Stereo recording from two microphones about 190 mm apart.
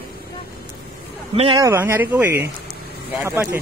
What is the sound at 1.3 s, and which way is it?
Speech, 30° right (ahead or behind).